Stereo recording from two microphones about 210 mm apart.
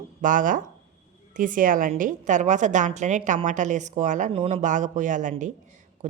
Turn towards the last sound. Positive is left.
turn(degrees=-35)  # may be behind; listen again after turning